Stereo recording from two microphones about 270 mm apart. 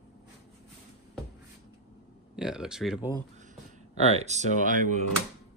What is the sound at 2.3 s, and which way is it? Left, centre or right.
Speech, centre.